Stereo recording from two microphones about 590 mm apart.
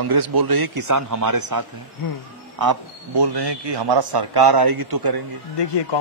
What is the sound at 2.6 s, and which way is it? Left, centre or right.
A man's voice, right.